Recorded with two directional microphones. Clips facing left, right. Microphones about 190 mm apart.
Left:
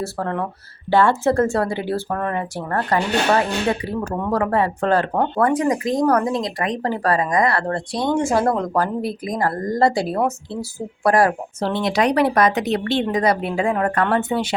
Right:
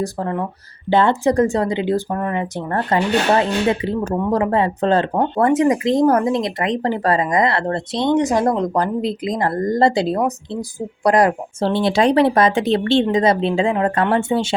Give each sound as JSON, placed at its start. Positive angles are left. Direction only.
{"t": 0.0, "sound": "speech", "side_deg": -15}